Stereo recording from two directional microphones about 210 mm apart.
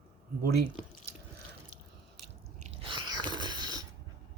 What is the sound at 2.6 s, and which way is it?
Biting, 25° right (ahead or behind).